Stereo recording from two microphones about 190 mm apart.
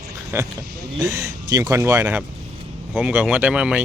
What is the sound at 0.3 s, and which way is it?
Speech, 10° right (ahead or behind).